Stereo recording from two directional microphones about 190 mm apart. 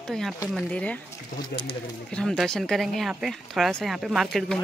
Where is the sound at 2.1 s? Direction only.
5° left (ahead or behind).